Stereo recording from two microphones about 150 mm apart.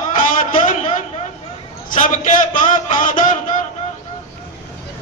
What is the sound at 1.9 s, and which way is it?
Speech, 60° left (ahead or behind).